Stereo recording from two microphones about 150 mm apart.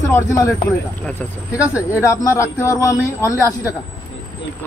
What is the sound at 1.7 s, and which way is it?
Speech, 20° left (ahead or behind).